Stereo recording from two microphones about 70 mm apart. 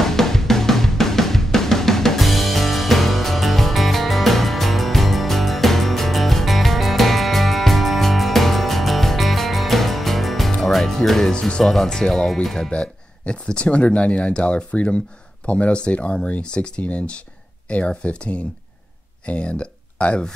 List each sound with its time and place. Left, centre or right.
0.0 s music: centre
10.5 s speech: centre